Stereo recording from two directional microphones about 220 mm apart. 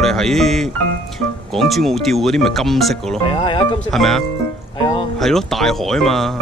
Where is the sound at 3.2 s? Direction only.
25° left (ahead or behind).